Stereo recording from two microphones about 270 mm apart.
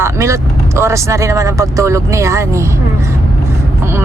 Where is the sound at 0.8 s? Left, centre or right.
Centre.